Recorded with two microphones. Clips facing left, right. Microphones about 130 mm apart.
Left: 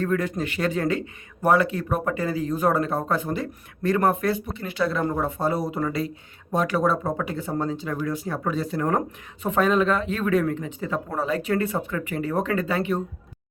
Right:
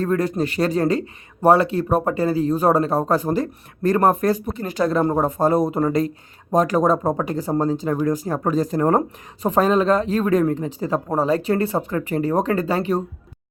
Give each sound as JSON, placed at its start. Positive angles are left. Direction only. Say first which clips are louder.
{"t": 0.0, "sound": "speech", "louder": "right 4 dB", "side_deg": -35}